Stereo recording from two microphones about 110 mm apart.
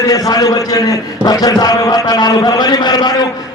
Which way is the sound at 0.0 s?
35° left (ahead or behind).